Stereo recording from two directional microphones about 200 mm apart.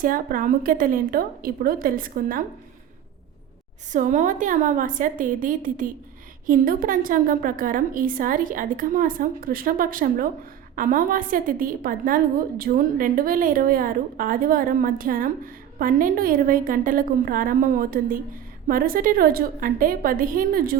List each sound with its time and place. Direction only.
0.0 s a woman's voice: 45° right (ahead or behind)
3.9 s a woman's voice: 40° right (ahead or behind)